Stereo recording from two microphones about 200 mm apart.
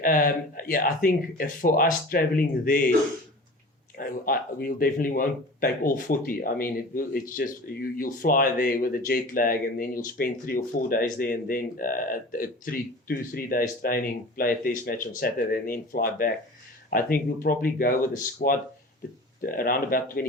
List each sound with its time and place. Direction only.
0.0 s speech: 45° left (ahead or behind)
3.9 s speech: 50° left (ahead or behind)